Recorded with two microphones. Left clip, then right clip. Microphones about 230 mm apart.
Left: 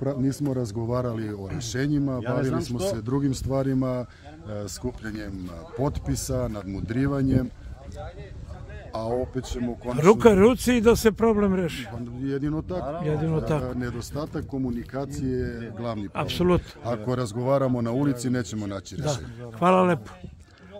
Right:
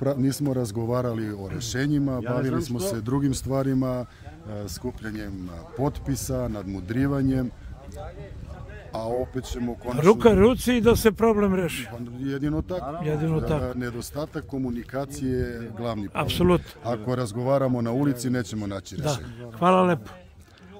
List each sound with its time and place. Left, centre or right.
0.0 s speech: right; by 7.4 s centre
8.9 s speech: centre
13.0 s speech: centre
13.7 s speech: centre